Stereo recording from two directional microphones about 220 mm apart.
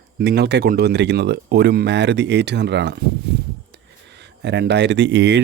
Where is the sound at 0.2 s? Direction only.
50° right (ahead or behind).